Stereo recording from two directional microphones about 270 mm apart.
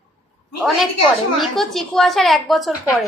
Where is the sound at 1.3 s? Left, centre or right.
Centre.